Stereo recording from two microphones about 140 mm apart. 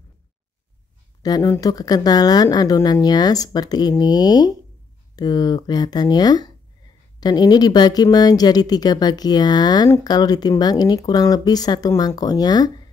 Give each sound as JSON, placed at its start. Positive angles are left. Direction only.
{"t": 1.2, "sound": "speech", "side_deg": 25}